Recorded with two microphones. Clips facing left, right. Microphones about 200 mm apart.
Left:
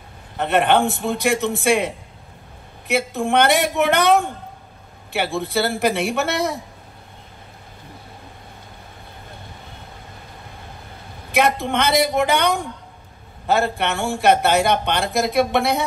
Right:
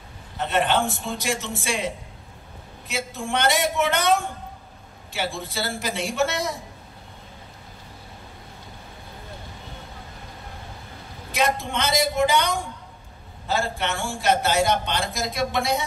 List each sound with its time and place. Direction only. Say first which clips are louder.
0.4 s speech: left 5 dB; 60° left (ahead or behind)
11.3 s speech: left 5 dB; 60° left (ahead or behind)